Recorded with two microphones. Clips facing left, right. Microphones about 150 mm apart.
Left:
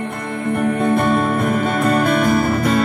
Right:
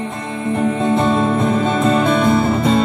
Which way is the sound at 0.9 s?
60° left (ahead or behind).